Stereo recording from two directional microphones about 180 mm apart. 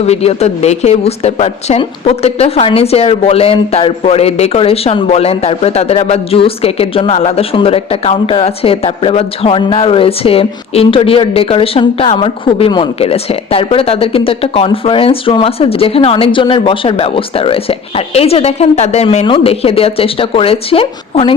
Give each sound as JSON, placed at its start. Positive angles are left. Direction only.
{"t": 0.0, "sound": "a woman's voice", "side_deg": 35}